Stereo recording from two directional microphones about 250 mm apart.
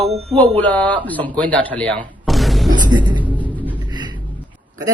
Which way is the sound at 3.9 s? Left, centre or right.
Centre.